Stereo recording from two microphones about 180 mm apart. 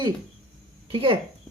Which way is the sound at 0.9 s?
30° right (ahead or behind).